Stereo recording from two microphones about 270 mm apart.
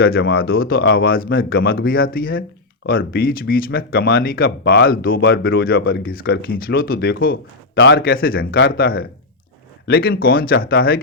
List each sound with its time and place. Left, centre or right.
0.0 s speech: left